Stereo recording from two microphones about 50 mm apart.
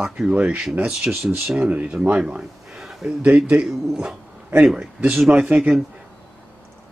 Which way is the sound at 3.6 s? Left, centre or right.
Centre.